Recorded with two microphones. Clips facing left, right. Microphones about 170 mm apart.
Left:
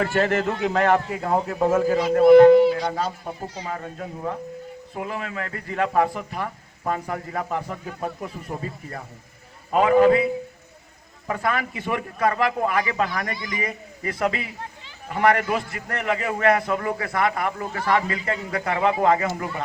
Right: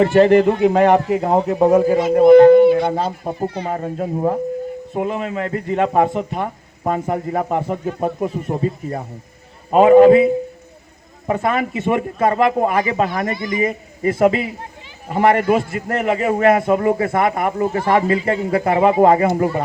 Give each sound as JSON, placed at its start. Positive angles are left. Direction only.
{"t": 0.0, "sound": "a man's voice", "side_deg": -20}
{"t": 1.7, "sound": "speech", "side_deg": -15}
{"t": 2.8, "sound": "a man's voice", "side_deg": -25}
{"t": 3.3, "sound": "speech", "side_deg": -60}
{"t": 3.7, "sound": "a child's voice", "side_deg": -30}
{"t": 11.3, "sound": "a man's voice", "side_deg": -25}